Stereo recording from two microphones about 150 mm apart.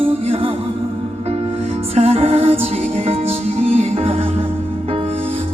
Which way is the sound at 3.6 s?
45° right (ahead or behind).